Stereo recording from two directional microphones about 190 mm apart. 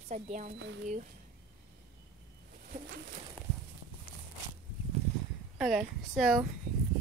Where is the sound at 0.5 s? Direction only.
75° right (ahead or behind).